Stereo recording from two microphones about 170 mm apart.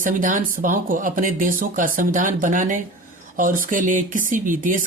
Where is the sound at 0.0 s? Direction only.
50° right (ahead or behind).